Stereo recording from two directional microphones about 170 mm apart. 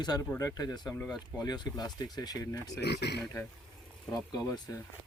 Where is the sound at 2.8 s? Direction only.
75° left (ahead or behind).